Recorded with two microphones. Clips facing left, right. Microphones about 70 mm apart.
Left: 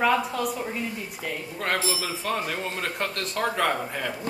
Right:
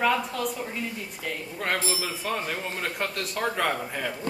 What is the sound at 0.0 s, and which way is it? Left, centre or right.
Speech, centre.